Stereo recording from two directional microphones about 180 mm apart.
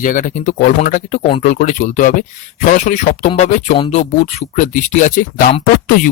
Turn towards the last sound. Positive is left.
turn(degrees=50)  # may be behind; listen again after turning